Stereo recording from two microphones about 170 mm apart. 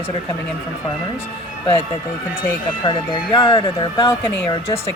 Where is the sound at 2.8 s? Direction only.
25° left (ahead or behind).